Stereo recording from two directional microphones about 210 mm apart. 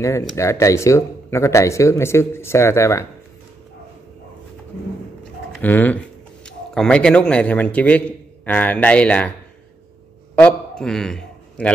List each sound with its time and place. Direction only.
0.4 s speech: 15° left (ahead or behind)
5.5 s a man's voice: 10° left (ahead or behind)
10.3 s a man's voice: 5° left (ahead or behind)